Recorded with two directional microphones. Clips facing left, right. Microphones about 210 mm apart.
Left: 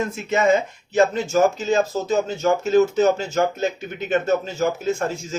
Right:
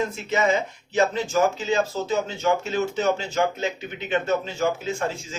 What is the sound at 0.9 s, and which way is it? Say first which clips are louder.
Speech: left 4 dB; 45° left (ahead or behind).